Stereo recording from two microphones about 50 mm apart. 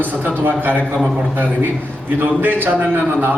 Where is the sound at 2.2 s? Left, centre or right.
Right.